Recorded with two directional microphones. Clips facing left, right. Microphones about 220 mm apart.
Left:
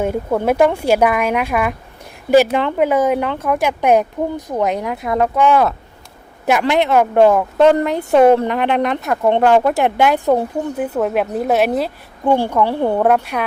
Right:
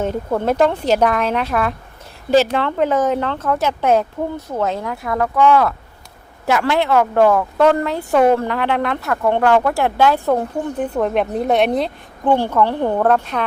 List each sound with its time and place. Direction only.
0.0 s speech: 10° left (ahead or behind)